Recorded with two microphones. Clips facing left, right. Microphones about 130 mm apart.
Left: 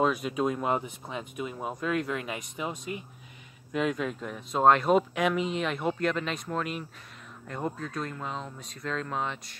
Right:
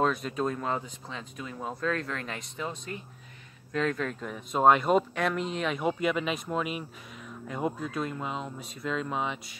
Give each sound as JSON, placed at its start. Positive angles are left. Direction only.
{"t": 0.0, "sound": "speech", "side_deg": 5}